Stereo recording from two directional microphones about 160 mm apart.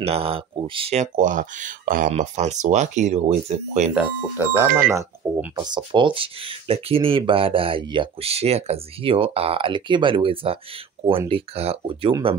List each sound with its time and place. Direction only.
0.0 s speech: 35° right (ahead or behind)
3.9 s speech: 10° right (ahead or behind)
5.6 s speech: 25° right (ahead or behind)